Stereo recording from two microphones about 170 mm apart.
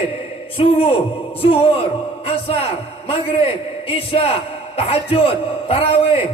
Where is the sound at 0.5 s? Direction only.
35° left (ahead or behind).